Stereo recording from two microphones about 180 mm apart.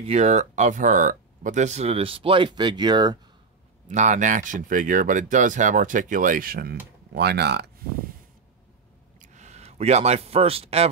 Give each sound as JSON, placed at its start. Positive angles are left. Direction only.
{"t": 0.0, "sound": "speech", "side_deg": -35}
{"t": 3.8, "sound": "speech", "side_deg": -45}
{"t": 9.2, "sound": "a man's voice", "side_deg": -40}